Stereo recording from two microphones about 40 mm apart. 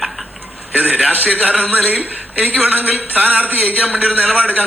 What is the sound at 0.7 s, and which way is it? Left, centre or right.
A man's voice, right.